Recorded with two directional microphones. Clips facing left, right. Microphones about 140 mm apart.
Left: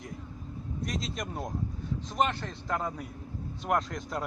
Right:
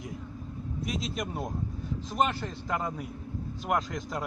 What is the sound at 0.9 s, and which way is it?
A man's voice, 5° right (ahead or behind).